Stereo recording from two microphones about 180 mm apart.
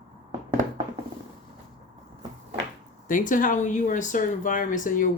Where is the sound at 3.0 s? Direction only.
45° left (ahead or behind).